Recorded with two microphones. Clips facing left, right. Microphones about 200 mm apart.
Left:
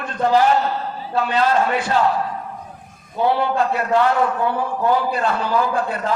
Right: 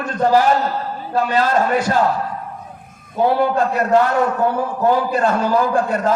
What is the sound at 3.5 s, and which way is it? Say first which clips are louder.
Speech: right 3 dB; 45° right (ahead or behind).